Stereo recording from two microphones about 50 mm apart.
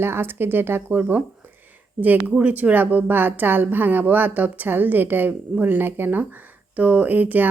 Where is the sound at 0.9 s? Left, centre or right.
Right.